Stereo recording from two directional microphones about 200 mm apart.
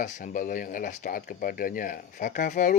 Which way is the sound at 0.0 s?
40° left (ahead or behind).